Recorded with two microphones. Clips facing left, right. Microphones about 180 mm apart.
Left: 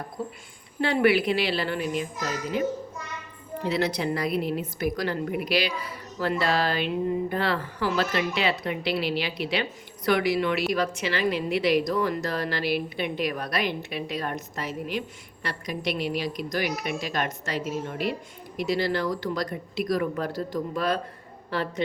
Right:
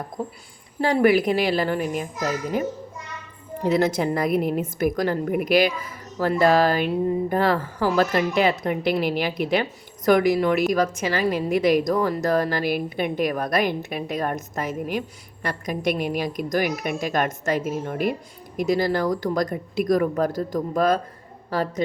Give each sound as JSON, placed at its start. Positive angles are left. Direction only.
{"t": 0.8, "sound": "a woman's voice", "side_deg": -40}
{"t": 3.6, "sound": "a woman's voice", "side_deg": -45}